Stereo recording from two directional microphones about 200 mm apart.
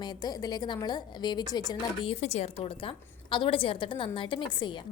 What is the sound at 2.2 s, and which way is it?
A woman's voice, 35° left (ahead or behind).